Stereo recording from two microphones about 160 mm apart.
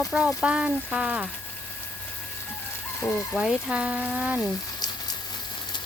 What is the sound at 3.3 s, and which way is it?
Speech, 5° right (ahead or behind).